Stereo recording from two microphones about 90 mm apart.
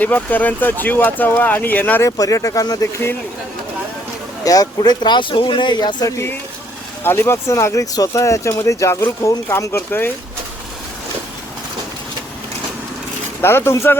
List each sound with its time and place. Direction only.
0.0 s speech: 20° left (ahead or behind)
2.0 s speech: 40° left (ahead or behind)
4.4 s speech: 45° left (ahead or behind)
7.0 s speech: 25° left (ahead or behind)
13.4 s speech: 25° left (ahead or behind)